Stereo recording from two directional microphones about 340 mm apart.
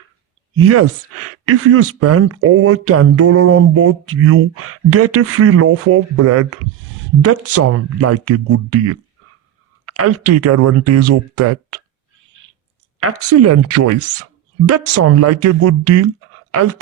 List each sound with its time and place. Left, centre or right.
0.5 s speech: right
13.0 s speech: right